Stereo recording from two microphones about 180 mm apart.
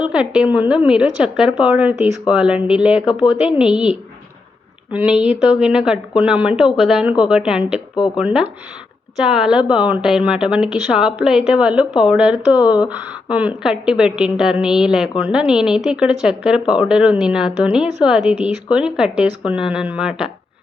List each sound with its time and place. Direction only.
0.0 s speech: 5° right (ahead or behind)
7.9 s speech: 25° left (ahead or behind)
8.2 s speech: 5° right (ahead or behind)